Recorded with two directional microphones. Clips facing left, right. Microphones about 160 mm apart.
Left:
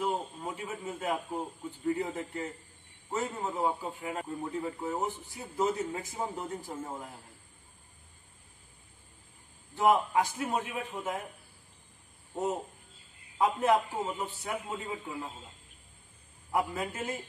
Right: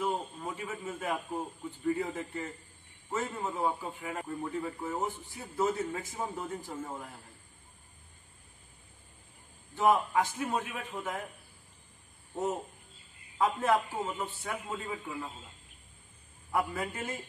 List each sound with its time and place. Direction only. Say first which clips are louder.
0.0 s a man's voice: left 1 dB; 15° left (ahead or behind)
4.5 s speech: left 1 dB; 25° left (ahead or behind)
4.7 s a man's voice: left 1 dB; 15° left (ahead or behind)
9.8 s a man's voice: left 1 dB; 15° left (ahead or behind)
13.4 s a man's voice: left 2 dB; 15° left (ahead or behind)
16.5 s a man's voice: left 1 dB; 15° left (ahead or behind)